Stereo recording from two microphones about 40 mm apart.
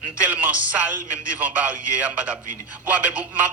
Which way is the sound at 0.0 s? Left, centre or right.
Right.